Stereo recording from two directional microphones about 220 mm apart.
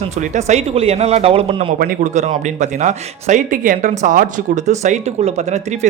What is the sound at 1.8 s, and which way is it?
Speech, 40° right (ahead or behind).